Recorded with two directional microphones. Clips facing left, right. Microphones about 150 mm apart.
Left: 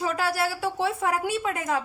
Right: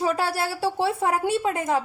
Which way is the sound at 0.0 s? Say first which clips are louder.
Right 2 dB; 30° right (ahead or behind).